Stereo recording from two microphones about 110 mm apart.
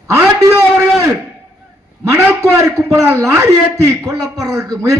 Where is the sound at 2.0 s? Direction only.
20° right (ahead or behind).